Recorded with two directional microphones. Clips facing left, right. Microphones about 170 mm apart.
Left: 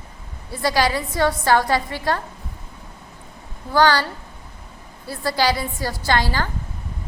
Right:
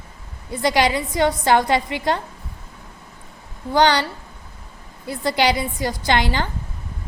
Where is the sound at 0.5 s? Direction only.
20° right (ahead or behind).